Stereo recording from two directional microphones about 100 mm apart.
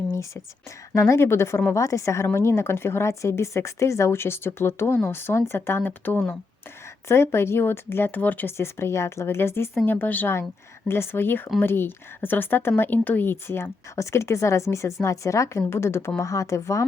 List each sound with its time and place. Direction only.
0.9 s speech: 30° left (ahead or behind)